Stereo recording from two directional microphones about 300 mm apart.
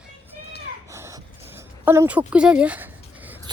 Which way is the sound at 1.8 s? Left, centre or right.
Centre.